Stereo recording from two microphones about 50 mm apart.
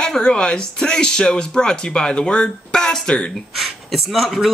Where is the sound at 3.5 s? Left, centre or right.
Centre.